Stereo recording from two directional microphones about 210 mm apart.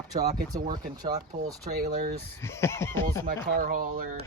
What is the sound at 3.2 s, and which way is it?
Speech, 40° right (ahead or behind).